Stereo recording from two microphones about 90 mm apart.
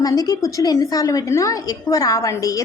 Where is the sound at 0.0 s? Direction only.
45° left (ahead or behind).